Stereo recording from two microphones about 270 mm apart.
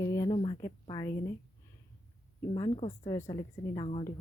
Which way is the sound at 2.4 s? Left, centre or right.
Centre.